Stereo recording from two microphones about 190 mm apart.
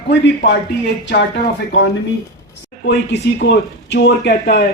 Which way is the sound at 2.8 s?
65° left (ahead or behind).